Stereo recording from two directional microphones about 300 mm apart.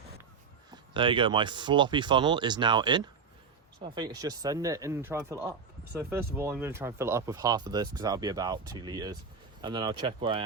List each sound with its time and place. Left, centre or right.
0.7 s speech: centre